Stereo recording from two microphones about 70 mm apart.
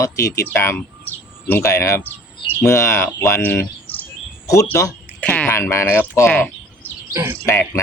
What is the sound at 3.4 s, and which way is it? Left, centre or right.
Bird, left.